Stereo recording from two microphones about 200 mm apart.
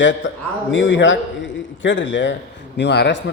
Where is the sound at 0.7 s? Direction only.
65° left (ahead or behind).